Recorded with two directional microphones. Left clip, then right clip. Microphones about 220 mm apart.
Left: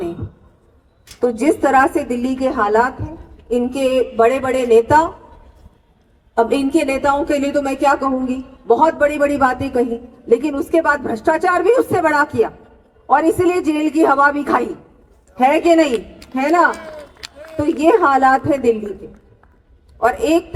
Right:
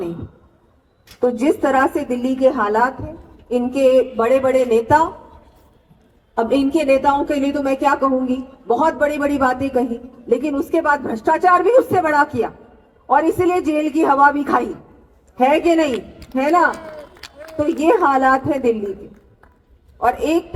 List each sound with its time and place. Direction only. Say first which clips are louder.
1.0 s a woman's voice: left 1 dB; 25° left (ahead or behind)
6.3 s a woman's voice: left 2 dB; 25° left (ahead or behind)
17.8 s a woman's voice: left 2 dB; 25° left (ahead or behind)
20.0 s a woman's voice: left 2 dB; 25° left (ahead or behind)